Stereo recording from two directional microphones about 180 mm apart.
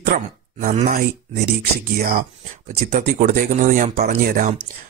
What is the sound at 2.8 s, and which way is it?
Speech, 50° right (ahead or behind).